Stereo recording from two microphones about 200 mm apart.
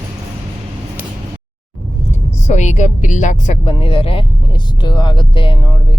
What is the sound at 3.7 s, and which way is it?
Speech, 25° left (ahead or behind).